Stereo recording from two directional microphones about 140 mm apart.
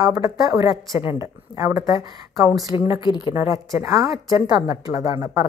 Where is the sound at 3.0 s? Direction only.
30° left (ahead or behind).